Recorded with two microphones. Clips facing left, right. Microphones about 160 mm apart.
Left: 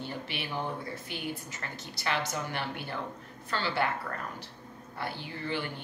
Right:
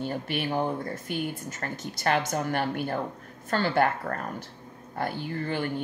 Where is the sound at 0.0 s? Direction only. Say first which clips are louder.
Right 8 dB; 50° right (ahead or behind).